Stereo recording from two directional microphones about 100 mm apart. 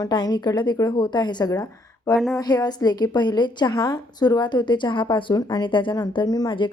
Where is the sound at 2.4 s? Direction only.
40° left (ahead or behind).